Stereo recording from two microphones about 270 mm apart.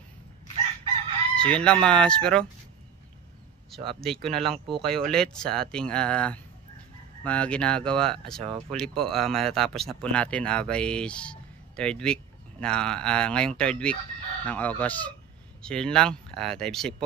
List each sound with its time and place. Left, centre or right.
1.3 s speech: centre
3.9 s speech: centre